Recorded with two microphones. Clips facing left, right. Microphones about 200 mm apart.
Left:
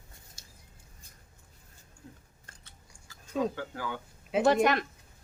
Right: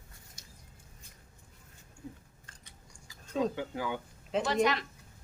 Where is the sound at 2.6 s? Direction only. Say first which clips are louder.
Right 2 dB; 15° right (ahead or behind).